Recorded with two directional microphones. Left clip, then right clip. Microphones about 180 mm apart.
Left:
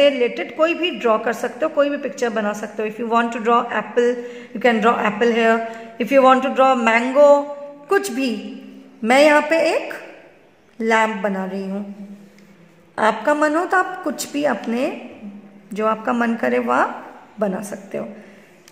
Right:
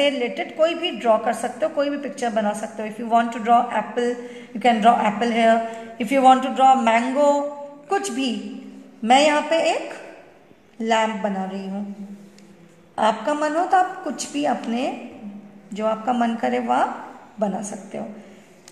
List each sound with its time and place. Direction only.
0.0 s a man's voice: 50° left (ahead or behind)
10.8 s a man's voice: 50° left (ahead or behind)
12.9 s a man's voice: 50° left (ahead or behind)